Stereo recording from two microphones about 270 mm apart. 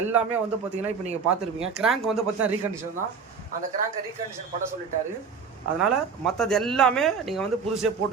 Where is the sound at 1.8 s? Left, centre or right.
Centre.